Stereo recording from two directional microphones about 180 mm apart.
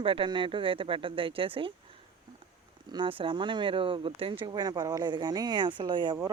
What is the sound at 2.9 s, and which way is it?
Speech, 25° right (ahead or behind).